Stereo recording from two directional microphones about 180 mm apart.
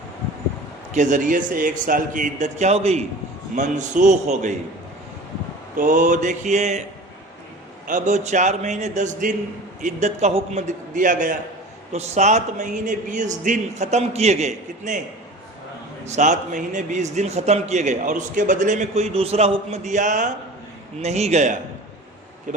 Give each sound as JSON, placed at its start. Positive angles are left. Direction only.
{"t": 0.9, "sound": "a man's voice", "side_deg": -45}
{"t": 5.7, "sound": "a man's voice", "side_deg": -45}
{"t": 7.9, "sound": "a man's voice", "side_deg": -45}
{"t": 16.0, "sound": "a man's voice", "side_deg": -40}